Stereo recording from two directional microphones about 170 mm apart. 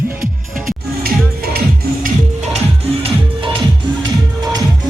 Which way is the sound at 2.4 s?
40° right (ahead or behind).